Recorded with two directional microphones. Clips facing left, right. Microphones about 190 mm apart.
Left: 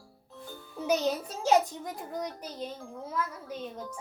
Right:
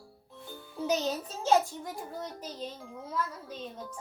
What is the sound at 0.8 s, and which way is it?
A child's voice, 10° left (ahead or behind).